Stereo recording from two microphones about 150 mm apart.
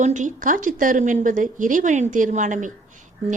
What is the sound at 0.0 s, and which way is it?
Speech, 55° right (ahead or behind).